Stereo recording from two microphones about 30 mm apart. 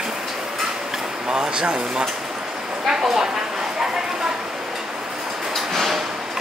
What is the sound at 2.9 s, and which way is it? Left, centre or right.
Speech, centre.